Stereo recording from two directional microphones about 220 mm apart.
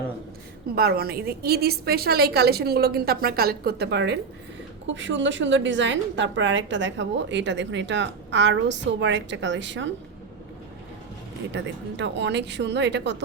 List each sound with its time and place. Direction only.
0.8 s a woman's voice: 45° right (ahead or behind)
11.5 s a woman's voice: 55° right (ahead or behind)